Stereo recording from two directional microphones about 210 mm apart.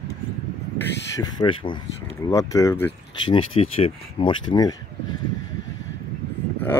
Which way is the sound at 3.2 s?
25° left (ahead or behind).